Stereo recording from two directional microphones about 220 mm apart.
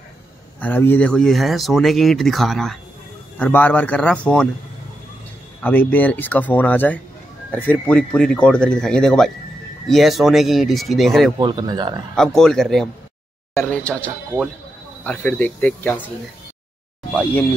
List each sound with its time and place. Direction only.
0.6 s speech: 10° left (ahead or behind)
5.6 s speech: 10° left (ahead or behind)
11.3 s speech: 20° right (ahead or behind)
12.4 s speech: centre (ahead or behind)
17.1 s speech: 5° left (ahead or behind)